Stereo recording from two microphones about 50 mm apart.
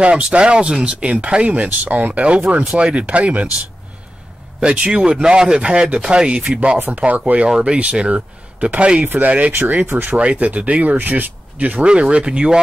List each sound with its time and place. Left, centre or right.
0.0 s speech: right
4.6 s speech: centre
7.4 s speech: centre
9.0 s speech: right
10.1 s speech: right